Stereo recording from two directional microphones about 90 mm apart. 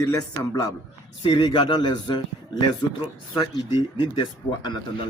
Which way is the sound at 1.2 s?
55° left (ahead or behind).